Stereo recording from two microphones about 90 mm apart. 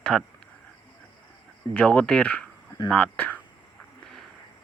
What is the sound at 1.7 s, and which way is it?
Speech, 10° left (ahead or behind).